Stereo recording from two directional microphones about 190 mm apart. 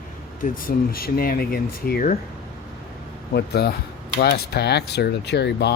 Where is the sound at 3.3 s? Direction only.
55° left (ahead or behind).